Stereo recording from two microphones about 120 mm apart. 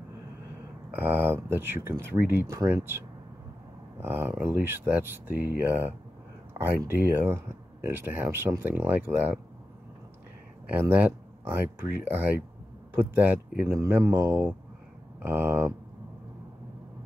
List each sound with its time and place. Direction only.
1.0 s speech: 15° right (ahead or behind)
4.0 s speech: 15° right (ahead or behind)
10.7 s speech: 15° right (ahead or behind)